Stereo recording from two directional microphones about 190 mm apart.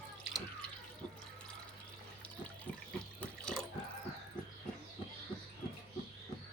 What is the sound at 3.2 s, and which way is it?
Water, 5° left (ahead or behind).